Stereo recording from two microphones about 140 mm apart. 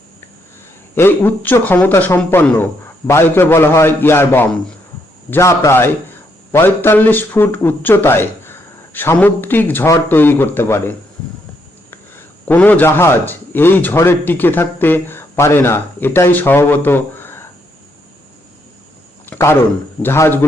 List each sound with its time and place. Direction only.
0.9 s a man's voice: 15° left (ahead or behind)
19.2 s a sound: 15° left (ahead or behind)
20.0 s a man's voice: 15° left (ahead or behind)